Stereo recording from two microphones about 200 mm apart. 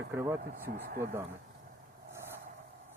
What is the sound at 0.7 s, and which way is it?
Speech, 45° right (ahead or behind).